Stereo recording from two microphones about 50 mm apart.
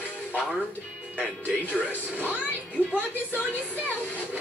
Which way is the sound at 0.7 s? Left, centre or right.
Right.